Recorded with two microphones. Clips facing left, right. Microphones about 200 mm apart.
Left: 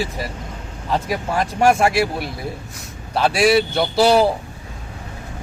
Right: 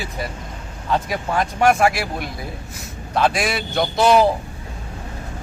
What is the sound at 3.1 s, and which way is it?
Speech, 30° left (ahead or behind).